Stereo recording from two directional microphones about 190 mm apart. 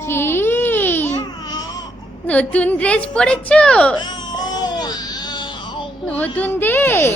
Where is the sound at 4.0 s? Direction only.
25° left (ahead or behind).